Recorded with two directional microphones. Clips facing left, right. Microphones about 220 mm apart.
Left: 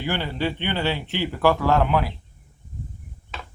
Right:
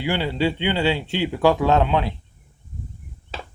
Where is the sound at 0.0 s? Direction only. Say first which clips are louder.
Right 4 dB; 15° right (ahead or behind).